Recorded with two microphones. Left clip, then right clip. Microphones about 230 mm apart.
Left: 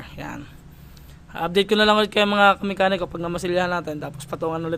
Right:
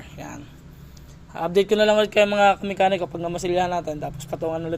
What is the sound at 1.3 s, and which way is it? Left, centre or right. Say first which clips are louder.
Speech: even; centre.